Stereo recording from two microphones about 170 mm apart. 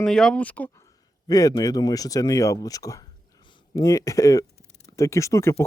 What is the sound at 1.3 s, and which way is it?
Speech, 20° left (ahead or behind).